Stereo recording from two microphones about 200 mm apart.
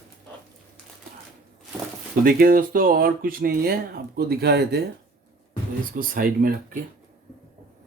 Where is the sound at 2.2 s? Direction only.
45° right (ahead or behind).